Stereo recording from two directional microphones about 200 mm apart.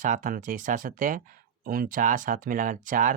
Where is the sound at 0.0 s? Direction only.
40° right (ahead or behind).